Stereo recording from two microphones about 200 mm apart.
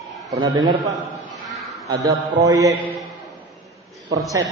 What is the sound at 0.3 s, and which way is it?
Speech, 20° right (ahead or behind).